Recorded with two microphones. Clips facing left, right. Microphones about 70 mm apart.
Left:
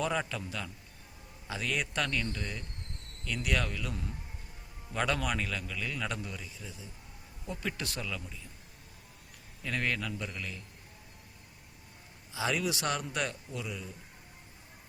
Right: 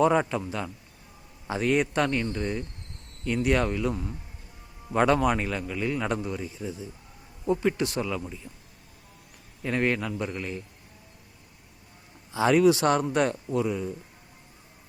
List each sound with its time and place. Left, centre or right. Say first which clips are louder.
0.0 s a man's voice: right 10 dB; right
9.6 s speech: right 7 dB; right
12.3 s speech: right 12 dB; right